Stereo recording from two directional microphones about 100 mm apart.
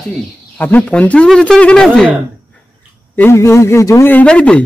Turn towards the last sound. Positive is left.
turn(degrees=10)  # may be behind; listen again after turning